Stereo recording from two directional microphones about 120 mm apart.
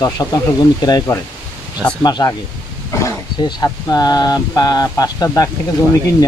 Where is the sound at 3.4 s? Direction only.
35° left (ahead or behind).